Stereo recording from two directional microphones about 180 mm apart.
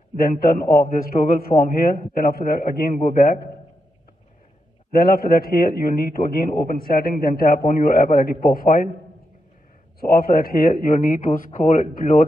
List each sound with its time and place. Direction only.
0.2 s a man's voice: 55° left (ahead or behind)
5.0 s a man's voice: 55° left (ahead or behind)
9.9 s a man's voice: 55° left (ahead or behind)